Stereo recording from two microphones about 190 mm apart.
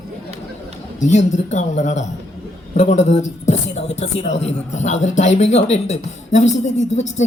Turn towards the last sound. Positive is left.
turn(degrees=40)  # may be behind; listen again after turning